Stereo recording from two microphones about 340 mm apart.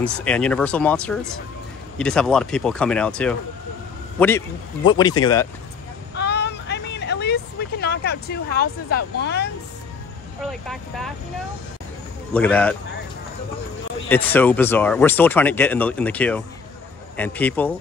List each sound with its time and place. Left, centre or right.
0.0 s speech: centre
4.8 s speech: centre
6.1 s vehicle: left
10.4 s speech: centre
12.4 s speech: centre
14.0 s speech: centre